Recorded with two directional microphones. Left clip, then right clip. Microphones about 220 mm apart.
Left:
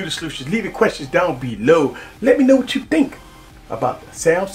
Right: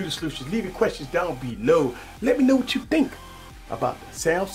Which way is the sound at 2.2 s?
30° right (ahead or behind).